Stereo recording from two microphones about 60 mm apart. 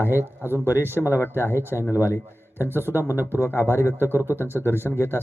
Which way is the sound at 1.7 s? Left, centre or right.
Left.